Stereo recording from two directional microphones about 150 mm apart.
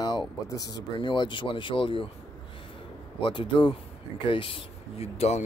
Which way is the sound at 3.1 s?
35° left (ahead or behind).